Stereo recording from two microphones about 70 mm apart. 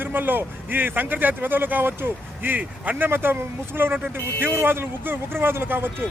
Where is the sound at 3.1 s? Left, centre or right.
Right.